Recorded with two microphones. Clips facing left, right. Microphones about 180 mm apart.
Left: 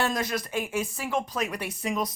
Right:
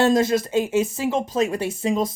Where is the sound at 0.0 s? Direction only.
25° right (ahead or behind).